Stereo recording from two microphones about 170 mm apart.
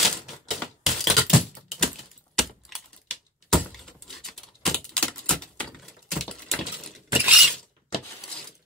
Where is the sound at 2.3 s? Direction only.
Centre (ahead or behind).